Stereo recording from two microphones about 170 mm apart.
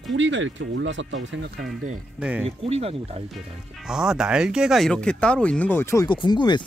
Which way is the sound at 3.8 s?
5° right (ahead or behind).